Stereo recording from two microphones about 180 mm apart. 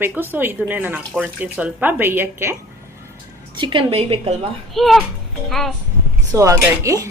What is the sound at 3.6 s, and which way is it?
Speech, 25° right (ahead or behind).